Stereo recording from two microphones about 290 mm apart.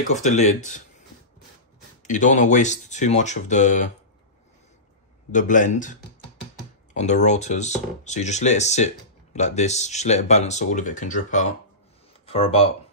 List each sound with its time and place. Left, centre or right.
0.1 s speech: left
2.0 s speech: left
5.3 s speech: left